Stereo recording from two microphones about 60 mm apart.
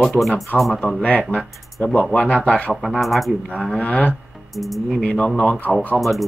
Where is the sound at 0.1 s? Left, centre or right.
Centre.